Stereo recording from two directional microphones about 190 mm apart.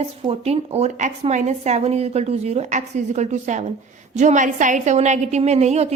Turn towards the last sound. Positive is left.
turn(degrees=-35)  # may be behind; listen again after turning